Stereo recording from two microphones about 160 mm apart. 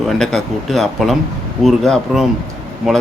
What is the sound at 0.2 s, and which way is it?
Speech, centre (ahead or behind).